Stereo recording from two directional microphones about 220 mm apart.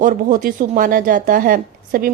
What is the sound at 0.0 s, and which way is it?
A woman's voice, 35° right (ahead or behind).